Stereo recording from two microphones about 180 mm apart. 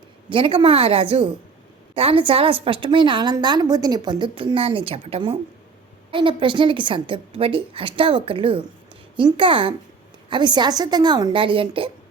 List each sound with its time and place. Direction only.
0.3 s a woman's voice: 30° right (ahead or behind)